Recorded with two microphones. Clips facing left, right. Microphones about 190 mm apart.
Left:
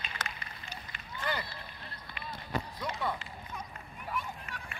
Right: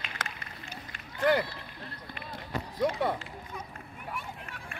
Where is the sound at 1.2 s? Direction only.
65° right (ahead or behind).